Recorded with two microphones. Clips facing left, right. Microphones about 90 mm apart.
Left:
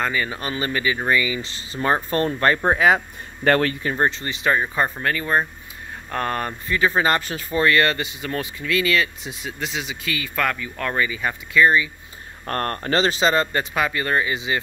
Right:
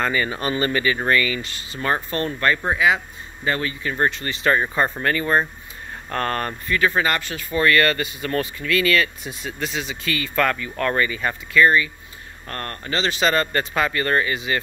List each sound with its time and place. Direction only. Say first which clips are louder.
0.0 s speech: right 2 dB; centre (ahead or behind)
1.4 s speech: left 2 dB; 25° left (ahead or behind)
3.4 s speech: left 6 dB; 55° left (ahead or behind)
3.9 s speech: even; 20° left (ahead or behind)
4.5 s speech: right 1 dB; 5° left (ahead or behind)
7.0 s speech: left 2 dB; 30° left (ahead or behind)
7.5 s speech: even; 20° left (ahead or behind)
12.4 s speech: left 6 dB; 40° left (ahead or behind)
13.2 s speech: left 1 dB; 15° left (ahead or behind)